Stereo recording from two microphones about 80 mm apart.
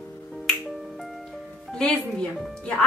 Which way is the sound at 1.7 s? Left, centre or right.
Centre.